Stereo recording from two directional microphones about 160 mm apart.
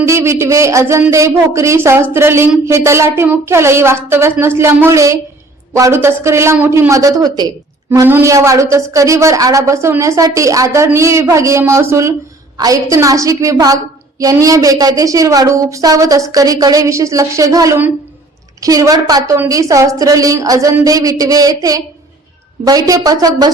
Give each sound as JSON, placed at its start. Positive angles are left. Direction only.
{"t": 0.0, "sound": "a woman's voice", "side_deg": -15}